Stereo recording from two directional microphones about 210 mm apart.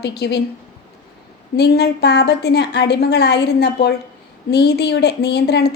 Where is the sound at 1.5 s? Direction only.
50° left (ahead or behind).